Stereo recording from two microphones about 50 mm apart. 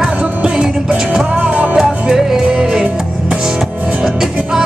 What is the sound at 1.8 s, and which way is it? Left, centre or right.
Music, centre.